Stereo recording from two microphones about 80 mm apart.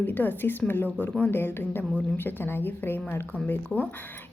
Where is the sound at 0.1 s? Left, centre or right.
Left.